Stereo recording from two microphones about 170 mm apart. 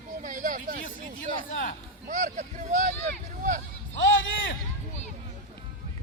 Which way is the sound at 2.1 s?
45° right (ahead or behind).